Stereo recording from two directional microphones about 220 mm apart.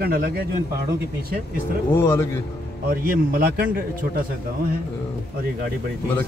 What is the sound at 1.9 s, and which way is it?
Speech, 10° left (ahead or behind).